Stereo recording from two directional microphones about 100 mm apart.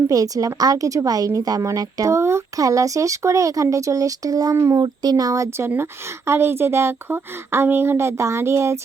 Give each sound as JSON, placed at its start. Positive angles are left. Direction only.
{"t": 0.1, "sound": "a woman's voice", "side_deg": -35}
{"t": 4.8, "sound": "a woman's voice", "side_deg": -40}